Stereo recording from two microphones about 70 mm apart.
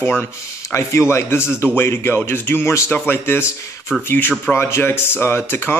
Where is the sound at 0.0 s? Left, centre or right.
Left.